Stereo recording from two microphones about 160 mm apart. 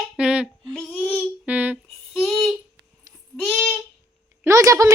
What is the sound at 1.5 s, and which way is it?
Humming, 10° right (ahead or behind).